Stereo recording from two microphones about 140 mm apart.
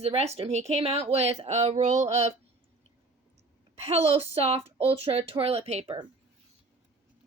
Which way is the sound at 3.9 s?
45° right (ahead or behind).